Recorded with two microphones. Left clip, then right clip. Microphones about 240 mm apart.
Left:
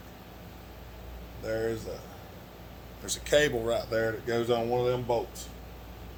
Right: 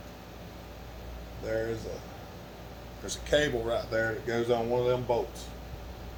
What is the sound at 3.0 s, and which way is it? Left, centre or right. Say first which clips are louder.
Speech: left 2 dB; left.